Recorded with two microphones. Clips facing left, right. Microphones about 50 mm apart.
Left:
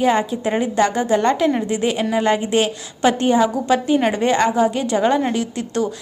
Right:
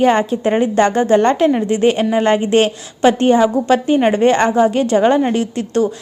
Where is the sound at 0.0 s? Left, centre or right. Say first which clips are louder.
Right 4 dB; right.